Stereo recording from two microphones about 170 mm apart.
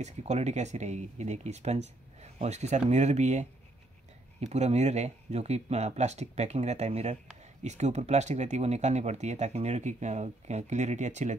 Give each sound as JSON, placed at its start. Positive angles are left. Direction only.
{"t": 0.0, "sound": "speech", "side_deg": -40}
{"t": 4.5, "sound": "speech", "side_deg": -40}